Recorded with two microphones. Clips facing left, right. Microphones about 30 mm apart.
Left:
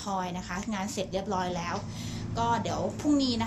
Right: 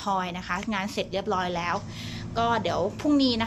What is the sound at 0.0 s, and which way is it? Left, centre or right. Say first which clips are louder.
A woman's voice: right 5 dB; right.